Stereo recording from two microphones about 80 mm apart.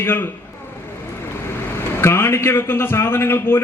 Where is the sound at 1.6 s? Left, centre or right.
Left.